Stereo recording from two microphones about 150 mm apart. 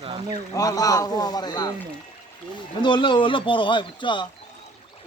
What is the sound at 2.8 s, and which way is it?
Speech, 30° left (ahead or behind).